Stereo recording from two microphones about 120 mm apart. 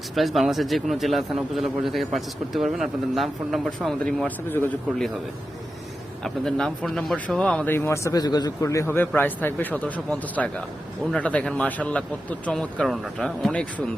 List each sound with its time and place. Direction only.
0.1 s a man's voice: centre (ahead or behind)
6.2 s a man's voice: 5° left (ahead or behind)